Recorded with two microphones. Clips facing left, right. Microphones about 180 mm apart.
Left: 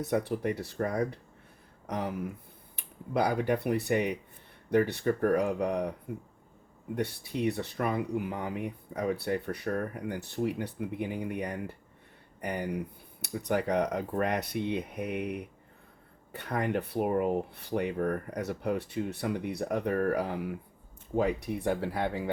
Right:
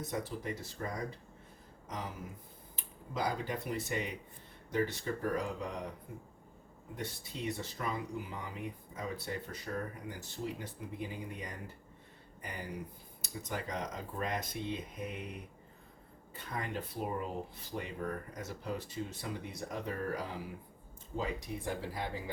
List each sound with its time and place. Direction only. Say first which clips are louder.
0.1 s speech: left 11 dB; 65° left (ahead or behind)
6.9 s speech: left 10 dB; 65° left (ahead or behind)